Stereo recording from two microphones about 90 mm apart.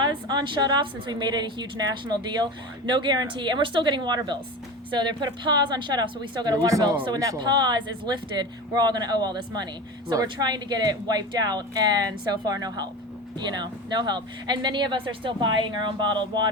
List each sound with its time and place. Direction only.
0.0 s a woman's voice: 55° right (ahead or behind)
7.3 s a woman's voice: 55° right (ahead or behind)